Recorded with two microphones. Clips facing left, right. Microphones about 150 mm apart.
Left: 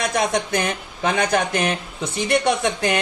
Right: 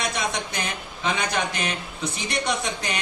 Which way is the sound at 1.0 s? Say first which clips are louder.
Left 6 dB; 50° left (ahead or behind).